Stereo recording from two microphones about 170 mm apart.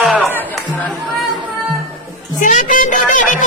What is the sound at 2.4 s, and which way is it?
Speech, 50° left (ahead or behind).